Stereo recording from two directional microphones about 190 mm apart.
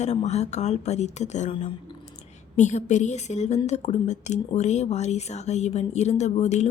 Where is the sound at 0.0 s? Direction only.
35° left (ahead or behind).